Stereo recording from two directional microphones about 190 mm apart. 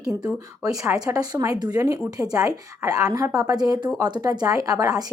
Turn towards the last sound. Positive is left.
turn(degrees=-20)  # may be behind; listen again after turning